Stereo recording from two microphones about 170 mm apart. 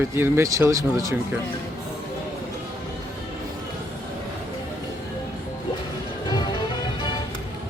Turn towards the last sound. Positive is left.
turn(degrees=25)  # may be behind; listen again after turning